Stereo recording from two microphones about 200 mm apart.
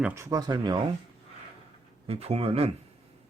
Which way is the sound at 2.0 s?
30° right (ahead or behind).